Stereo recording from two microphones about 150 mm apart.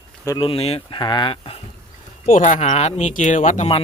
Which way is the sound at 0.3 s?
40° left (ahead or behind).